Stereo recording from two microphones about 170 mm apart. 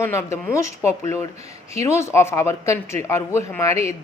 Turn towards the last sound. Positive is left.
turn(degrees=15)  # may be behind; listen again after turning